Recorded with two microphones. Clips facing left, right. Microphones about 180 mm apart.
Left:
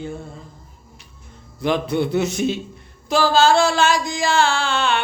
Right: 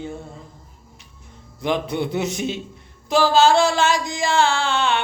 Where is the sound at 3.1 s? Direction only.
20° right (ahead or behind).